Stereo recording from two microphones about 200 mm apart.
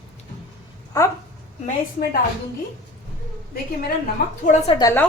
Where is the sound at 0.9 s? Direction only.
15° left (ahead or behind).